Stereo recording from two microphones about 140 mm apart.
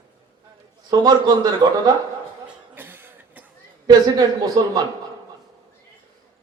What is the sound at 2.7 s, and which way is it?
Cough, 15° right (ahead or behind).